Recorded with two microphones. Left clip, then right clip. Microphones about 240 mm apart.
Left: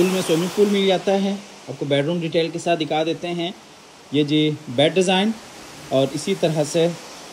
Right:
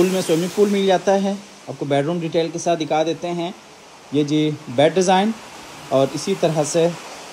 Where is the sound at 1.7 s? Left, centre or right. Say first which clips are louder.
Right 1 dB; centre.